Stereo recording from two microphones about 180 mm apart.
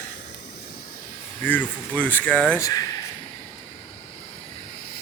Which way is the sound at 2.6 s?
20° left (ahead or behind).